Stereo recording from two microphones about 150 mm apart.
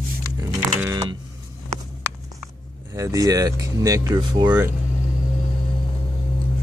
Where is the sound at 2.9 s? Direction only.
20° right (ahead or behind).